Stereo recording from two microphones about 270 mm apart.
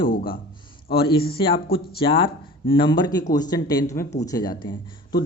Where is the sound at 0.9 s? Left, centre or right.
Centre.